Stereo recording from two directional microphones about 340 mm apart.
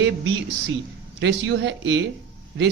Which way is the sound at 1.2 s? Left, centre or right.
Right.